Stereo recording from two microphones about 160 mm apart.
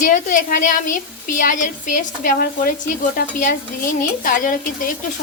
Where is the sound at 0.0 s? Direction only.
55° left (ahead or behind).